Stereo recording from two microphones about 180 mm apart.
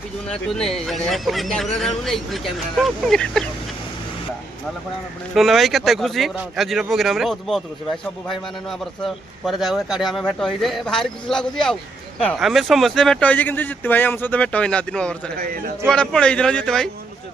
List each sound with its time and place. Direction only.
0.3 s speech: 5° left (ahead or behind)
5.3 s speech: centre (ahead or behind)
15.4 s a man's voice: 55° right (ahead or behind)
15.9 s speech: 5° left (ahead or behind)